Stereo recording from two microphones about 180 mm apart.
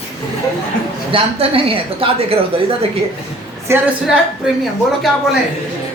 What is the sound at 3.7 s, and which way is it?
Speech, 15° right (ahead or behind).